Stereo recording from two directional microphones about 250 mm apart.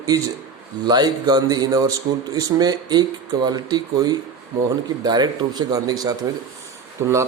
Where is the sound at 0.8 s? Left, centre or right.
Centre.